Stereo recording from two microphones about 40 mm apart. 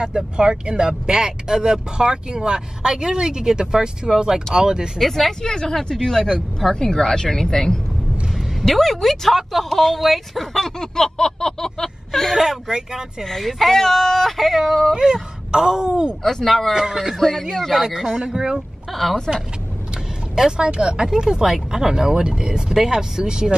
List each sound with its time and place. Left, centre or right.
0.0 s speech: centre
4.9 s speech: centre
5.4 s speech: centre
12.4 s speech: centre
13.2 s speech: centre
15.5 s speech: centre
16.2 s speech: centre
16.7 s speech: centre
17.2 s speech: centre
17.7 s speech: centre
18.9 s speech: centre
20.3 s speech: centre